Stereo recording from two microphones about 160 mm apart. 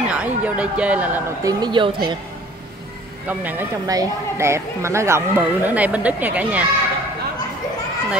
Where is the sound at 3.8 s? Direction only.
20° right (ahead or behind).